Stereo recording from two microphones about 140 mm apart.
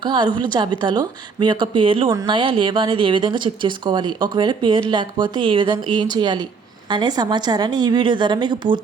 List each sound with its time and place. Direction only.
0.0 s speech: 35° right (ahead or behind)